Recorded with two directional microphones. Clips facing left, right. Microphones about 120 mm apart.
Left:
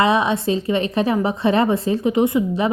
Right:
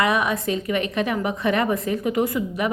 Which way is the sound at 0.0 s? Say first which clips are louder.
Left 4 dB; 25° left (ahead or behind).